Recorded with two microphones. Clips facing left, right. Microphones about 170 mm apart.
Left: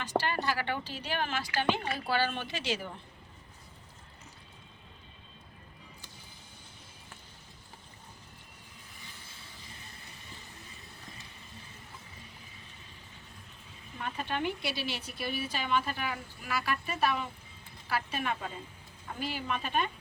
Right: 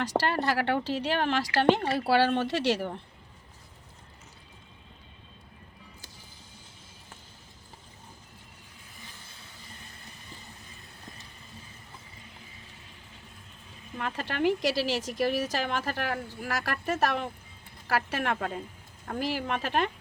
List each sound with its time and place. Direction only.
0.0 s speech: 75° right (ahead or behind)
14.0 s a woman's voice: 80° right; by 18.6 s 65° right (ahead or behind)
19.2 s speech: 85° right